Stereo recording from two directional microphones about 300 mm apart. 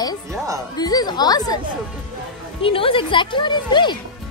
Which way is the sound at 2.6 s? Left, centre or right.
Centre.